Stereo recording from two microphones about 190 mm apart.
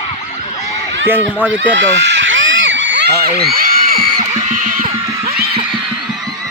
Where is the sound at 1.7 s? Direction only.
75° right (ahead or behind).